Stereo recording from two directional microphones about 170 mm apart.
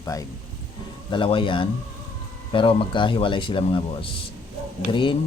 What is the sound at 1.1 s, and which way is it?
Speech, 30° left (ahead or behind).